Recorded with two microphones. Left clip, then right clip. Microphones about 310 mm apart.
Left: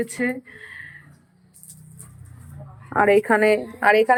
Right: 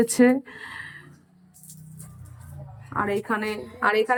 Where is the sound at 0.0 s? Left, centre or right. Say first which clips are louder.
Right 6 dB; centre.